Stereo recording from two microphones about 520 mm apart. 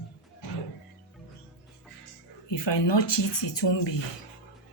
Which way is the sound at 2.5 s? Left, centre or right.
Left.